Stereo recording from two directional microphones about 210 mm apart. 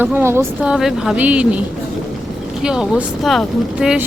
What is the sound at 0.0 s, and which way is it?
Speech, 10° right (ahead or behind).